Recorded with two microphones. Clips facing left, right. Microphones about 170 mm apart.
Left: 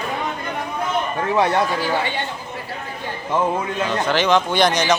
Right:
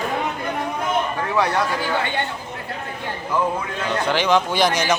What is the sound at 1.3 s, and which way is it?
Speech, 25° left (ahead or behind).